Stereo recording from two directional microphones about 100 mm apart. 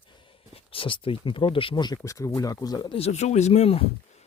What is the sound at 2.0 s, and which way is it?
Speech, 35° left (ahead or behind).